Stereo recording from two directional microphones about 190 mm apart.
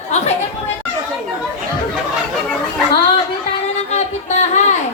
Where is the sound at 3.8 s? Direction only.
35° left (ahead or behind).